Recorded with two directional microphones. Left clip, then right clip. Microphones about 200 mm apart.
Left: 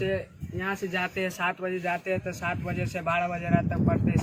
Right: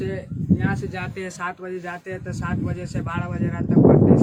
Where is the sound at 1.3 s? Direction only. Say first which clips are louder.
Left 1 dB; 15° right (ahead or behind).